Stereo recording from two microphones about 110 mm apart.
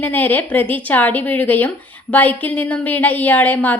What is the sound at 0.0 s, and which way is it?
A woman's voice, 15° left (ahead or behind).